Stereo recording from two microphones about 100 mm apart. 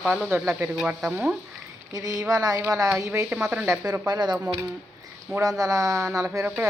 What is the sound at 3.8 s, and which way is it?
Speech, 40° right (ahead or behind).